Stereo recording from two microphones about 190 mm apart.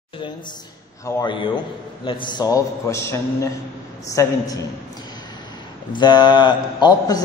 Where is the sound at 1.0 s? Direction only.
25° left (ahead or behind).